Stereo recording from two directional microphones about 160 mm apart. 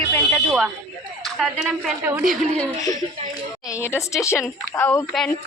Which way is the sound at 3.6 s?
15° left (ahead or behind).